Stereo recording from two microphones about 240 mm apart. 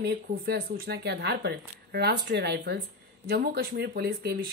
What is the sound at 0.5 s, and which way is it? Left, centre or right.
A woman's voice, right.